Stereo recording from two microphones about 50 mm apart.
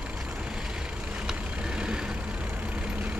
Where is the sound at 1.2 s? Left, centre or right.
Centre.